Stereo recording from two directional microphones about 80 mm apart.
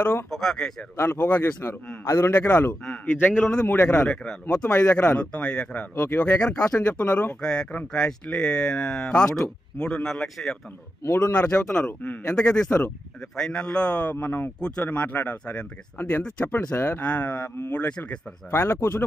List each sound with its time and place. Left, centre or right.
0.3 s speech: centre
0.9 s speech: left
4.0 s speech: centre
5.9 s speech: left
7.4 s speech: centre
11.3 s speech: centre
13.4 s speech: centre
14.2 s speech: left
17.0 s speech: centre
18.5 s speech: left